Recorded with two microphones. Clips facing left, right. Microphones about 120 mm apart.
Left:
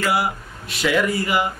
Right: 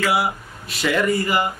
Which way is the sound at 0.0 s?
Centre (ahead or behind).